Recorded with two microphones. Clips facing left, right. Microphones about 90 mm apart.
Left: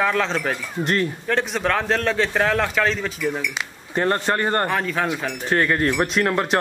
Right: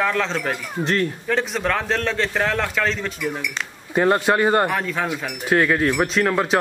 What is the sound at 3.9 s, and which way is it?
Speech, 10° right (ahead or behind).